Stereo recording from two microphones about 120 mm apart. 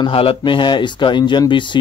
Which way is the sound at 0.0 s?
50° left (ahead or behind).